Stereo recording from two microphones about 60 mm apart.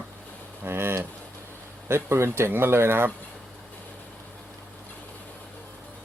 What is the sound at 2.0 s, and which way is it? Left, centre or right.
Speech, right.